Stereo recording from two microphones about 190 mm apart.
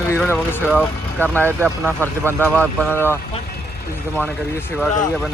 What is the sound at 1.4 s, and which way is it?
Speech, 10° right (ahead or behind).